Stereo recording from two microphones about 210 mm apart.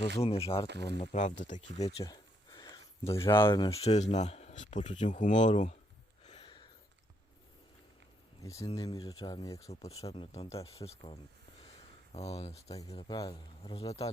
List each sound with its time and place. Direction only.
0.2 s speech: 30° left (ahead or behind)
0.7 s speech: 55° right (ahead or behind)
0.9 s speech: 30° left (ahead or behind)
2.0 s a sound: 20° left (ahead or behind)
3.2 s speech: 20° left (ahead or behind)
6.2 s a sound: 30° left (ahead or behind)
8.4 s speech: 15° left (ahead or behind)
9.6 s speech: 30° left (ahead or behind)
13.6 s speech: 30° left (ahead or behind)